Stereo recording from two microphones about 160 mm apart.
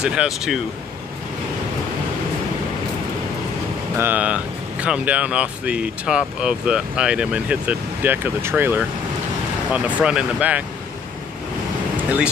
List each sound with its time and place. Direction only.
0.0 s speech: 5° right (ahead or behind)
3.9 s speech: 10° right (ahead or behind)
10.0 s speech: 5° right (ahead or behind)